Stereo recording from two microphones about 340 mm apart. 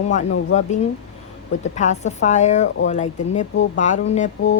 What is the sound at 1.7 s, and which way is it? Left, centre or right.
A woman's voice, left.